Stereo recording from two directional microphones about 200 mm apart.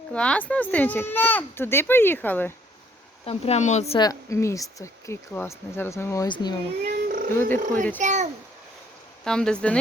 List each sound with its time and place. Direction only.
0.1 s speech: 5° left (ahead or behind)
3.2 s speech: 30° left (ahead or behind)
6.8 s cat: 45° right (ahead or behind)
7.3 s speech: 10° left (ahead or behind)
7.6 s a child's voice: 40° right (ahead or behind)
9.2 s speech: 5° left (ahead or behind)